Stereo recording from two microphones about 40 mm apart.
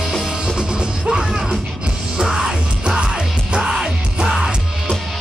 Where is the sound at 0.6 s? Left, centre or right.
Centre.